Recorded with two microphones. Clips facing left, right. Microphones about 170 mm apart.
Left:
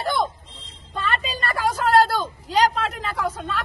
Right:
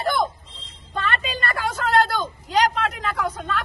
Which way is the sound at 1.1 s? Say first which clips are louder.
Even; 35° left (ahead or behind).